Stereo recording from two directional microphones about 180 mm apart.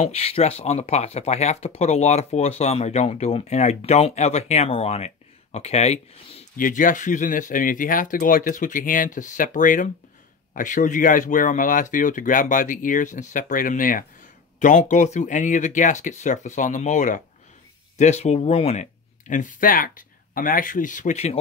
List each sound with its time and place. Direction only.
0.0 s speech: 35° left (ahead or behind)